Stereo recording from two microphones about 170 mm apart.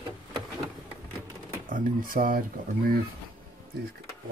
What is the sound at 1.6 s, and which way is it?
Speech, 55° right (ahead or behind).